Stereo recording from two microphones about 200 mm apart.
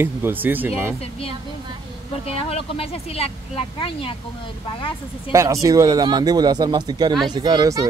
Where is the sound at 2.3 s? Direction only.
30° left (ahead or behind).